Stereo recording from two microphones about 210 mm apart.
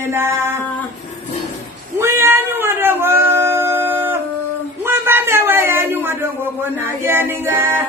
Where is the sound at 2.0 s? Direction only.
10° right (ahead or behind).